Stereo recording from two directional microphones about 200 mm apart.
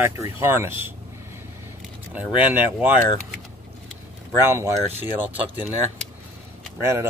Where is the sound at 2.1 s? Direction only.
10° right (ahead or behind).